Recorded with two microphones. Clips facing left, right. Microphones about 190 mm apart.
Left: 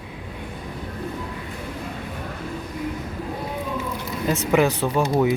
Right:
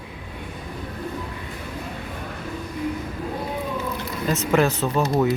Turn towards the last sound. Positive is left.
turn(degrees=15)  # may be behind; listen again after turning